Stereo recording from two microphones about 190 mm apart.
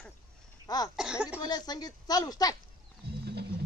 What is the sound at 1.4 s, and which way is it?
Speech, 20° left (ahead or behind).